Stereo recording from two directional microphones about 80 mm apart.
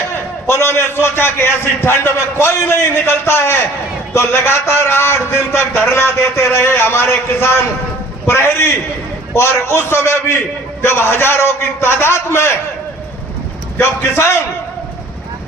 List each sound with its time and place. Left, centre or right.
0.1 s a man's voice: left
13.7 s a man's voice: left